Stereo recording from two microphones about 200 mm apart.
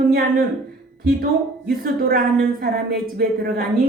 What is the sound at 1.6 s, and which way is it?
Speech, 50° right (ahead or behind).